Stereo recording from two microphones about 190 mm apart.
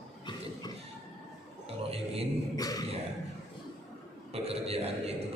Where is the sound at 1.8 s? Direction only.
30° right (ahead or behind).